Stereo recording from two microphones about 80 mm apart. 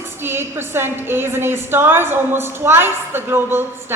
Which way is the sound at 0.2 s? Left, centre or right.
Right.